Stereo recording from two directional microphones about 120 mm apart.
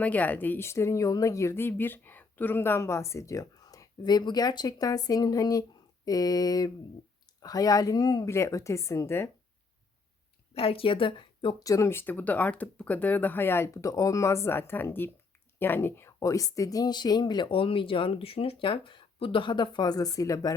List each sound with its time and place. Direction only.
0.0 s speech: 15° left (ahead or behind)
10.5 s a woman's voice: 55° left (ahead or behind)
11.6 s speech: 25° left (ahead or behind)